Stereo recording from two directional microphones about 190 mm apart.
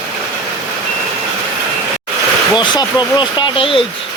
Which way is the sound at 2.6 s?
25° left (ahead or behind).